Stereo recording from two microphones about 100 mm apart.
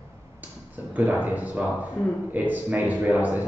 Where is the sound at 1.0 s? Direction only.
15° right (ahead or behind).